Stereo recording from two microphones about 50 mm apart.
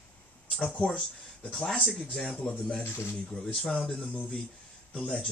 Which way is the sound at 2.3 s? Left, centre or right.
Left.